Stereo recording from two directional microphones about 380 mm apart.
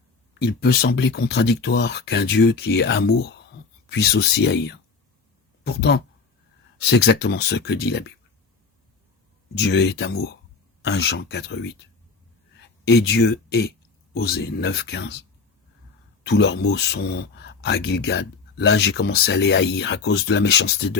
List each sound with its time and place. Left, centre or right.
0.6 s speech: left
9.6 s speech: left
16.2 s speech: left